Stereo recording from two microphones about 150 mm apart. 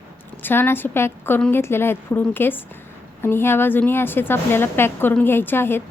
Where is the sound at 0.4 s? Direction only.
15° left (ahead or behind).